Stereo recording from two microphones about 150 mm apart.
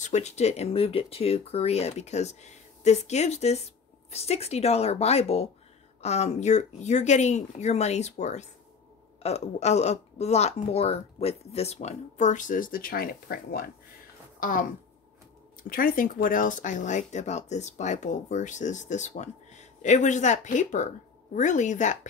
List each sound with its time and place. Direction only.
0.0 s speech: 50° left (ahead or behind); by 13.7 s 90° left
14.4 s speech: 65° left (ahead or behind)